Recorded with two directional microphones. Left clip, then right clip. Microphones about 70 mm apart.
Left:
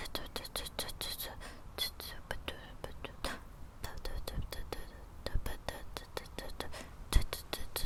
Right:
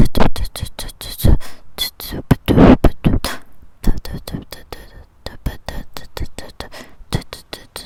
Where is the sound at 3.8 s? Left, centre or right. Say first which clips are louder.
Right 16 dB; right.